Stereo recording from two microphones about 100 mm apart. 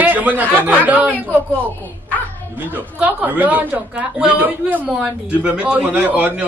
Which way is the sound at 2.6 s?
20° right (ahead or behind).